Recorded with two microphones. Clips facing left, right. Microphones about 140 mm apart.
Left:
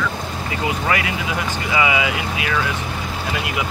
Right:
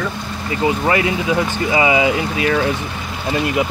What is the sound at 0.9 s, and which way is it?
Speech, 30° right (ahead or behind).